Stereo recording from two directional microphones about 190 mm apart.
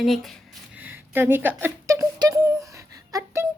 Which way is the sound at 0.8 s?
10° right (ahead or behind).